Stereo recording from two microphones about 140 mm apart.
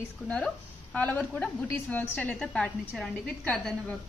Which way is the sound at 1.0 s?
10° left (ahead or behind).